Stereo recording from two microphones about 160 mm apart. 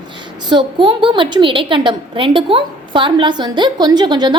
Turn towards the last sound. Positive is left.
turn(degrees=-25)  # may be behind; listen again after turning